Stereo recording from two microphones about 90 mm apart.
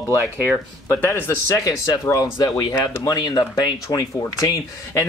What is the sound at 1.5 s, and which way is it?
Speech, 40° left (ahead or behind).